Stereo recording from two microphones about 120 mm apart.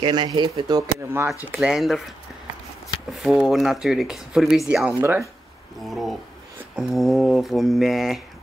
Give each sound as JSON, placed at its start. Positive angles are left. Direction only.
{"t": 0.0, "sound": "speech", "side_deg": -35}
{"t": 1.6, "sound": "speech", "side_deg": -5}
{"t": 3.1, "sound": "speech", "side_deg": 0}
{"t": 5.9, "sound": "speech", "side_deg": 0}